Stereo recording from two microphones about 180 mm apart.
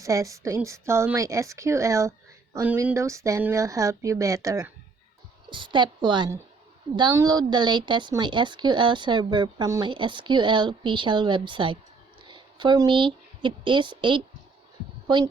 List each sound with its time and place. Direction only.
0.0 s a woman's voice: 20° right (ahead or behind)